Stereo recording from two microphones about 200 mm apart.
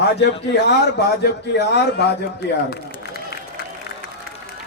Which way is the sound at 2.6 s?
50° left (ahead or behind).